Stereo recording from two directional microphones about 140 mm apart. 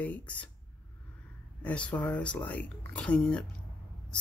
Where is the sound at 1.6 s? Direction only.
10° left (ahead or behind).